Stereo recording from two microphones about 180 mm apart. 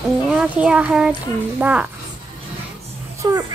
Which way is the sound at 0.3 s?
5° right (ahead or behind).